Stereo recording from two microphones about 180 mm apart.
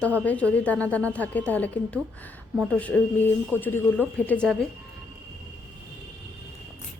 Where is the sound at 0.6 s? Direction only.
10° left (ahead or behind).